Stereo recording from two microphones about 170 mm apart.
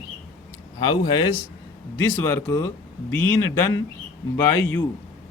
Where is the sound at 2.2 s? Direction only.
15° left (ahead or behind).